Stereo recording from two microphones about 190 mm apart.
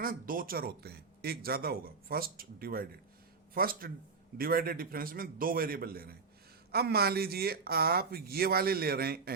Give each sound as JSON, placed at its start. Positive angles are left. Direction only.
{"t": 0.0, "sound": "speech", "side_deg": -45}